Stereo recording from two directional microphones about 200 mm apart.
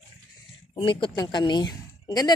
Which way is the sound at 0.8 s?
25° left (ahead or behind).